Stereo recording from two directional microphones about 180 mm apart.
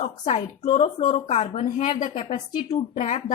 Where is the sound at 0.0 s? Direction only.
35° left (ahead or behind).